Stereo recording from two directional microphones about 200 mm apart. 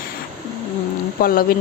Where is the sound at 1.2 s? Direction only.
45° left (ahead or behind).